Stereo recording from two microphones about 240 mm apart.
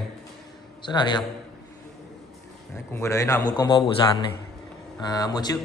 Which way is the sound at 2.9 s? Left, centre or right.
Centre.